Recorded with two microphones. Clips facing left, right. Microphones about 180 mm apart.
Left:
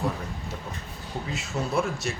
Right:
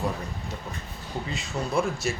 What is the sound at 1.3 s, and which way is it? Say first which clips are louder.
Speech: even; 5° left (ahead or behind).